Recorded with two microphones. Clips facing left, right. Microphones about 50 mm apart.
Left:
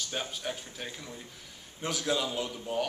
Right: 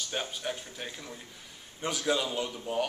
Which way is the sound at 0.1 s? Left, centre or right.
Centre.